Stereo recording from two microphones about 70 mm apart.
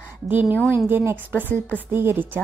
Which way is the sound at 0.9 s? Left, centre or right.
Right.